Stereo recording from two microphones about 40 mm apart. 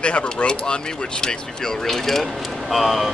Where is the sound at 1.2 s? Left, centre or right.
Centre.